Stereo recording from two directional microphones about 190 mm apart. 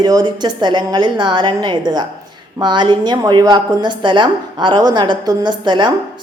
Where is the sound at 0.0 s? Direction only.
20° right (ahead or behind).